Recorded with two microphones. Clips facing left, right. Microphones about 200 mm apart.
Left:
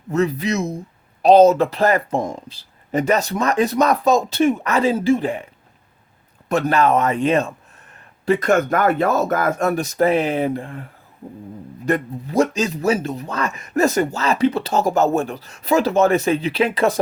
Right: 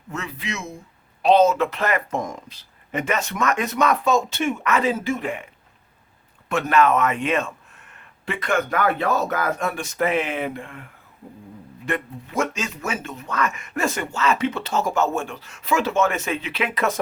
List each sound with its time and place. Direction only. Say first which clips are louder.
0.1 s speech: left 12 dB; 40° left (ahead or behind)
6.5 s speech: left 2 dB; 35° left (ahead or behind)
11.9 s speech: left 7 dB; 40° left (ahead or behind)